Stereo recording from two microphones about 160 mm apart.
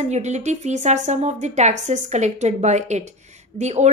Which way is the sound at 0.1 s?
45° right (ahead or behind).